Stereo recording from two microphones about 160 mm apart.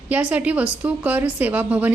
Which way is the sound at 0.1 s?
10° right (ahead or behind).